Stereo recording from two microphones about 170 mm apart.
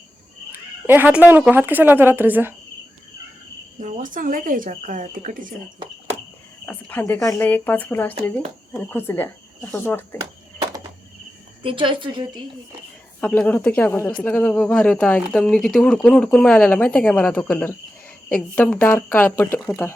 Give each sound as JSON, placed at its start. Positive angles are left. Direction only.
{"t": 0.9, "sound": "speech", "side_deg": -10}
{"t": 3.8, "sound": "speech", "side_deg": -45}
{"t": 6.7, "sound": "speech", "side_deg": 10}
{"t": 10.2, "sound": "a sound", "side_deg": -20}
{"t": 11.6, "sound": "a woman's voice", "side_deg": -30}
{"t": 13.1, "sound": "speech", "side_deg": 10}